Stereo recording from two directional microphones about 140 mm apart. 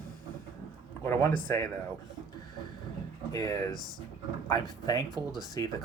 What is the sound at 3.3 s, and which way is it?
Speech, 30° left (ahead or behind).